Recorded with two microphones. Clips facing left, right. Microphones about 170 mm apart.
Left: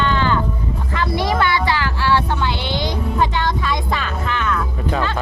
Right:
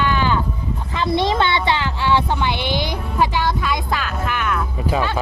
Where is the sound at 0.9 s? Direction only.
20° right (ahead or behind).